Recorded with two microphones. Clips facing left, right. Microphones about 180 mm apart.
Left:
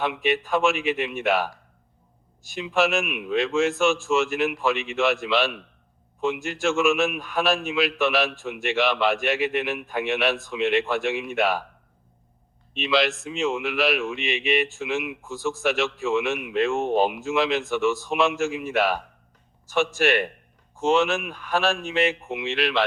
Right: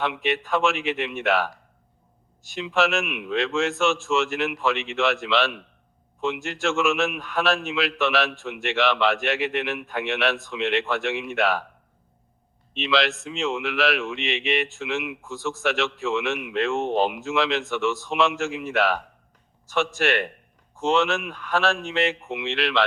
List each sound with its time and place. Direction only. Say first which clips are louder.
0.0 s a man's voice: left 1 dB; 15° left (ahead or behind)
2.7 s a man's voice: left 1 dB; 15° left (ahead or behind)
12.7 s a man's voice: left 1 dB; 15° left (ahead or behind)
20.8 s a man's voice: left 1 dB; 15° left (ahead or behind)